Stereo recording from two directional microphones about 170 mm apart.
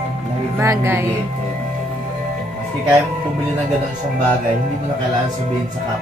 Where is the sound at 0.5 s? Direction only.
15° right (ahead or behind).